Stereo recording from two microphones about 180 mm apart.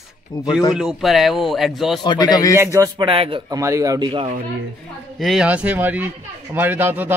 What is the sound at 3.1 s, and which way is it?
Speech, 30° right (ahead or behind).